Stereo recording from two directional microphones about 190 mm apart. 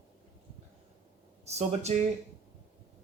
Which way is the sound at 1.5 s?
35° right (ahead or behind).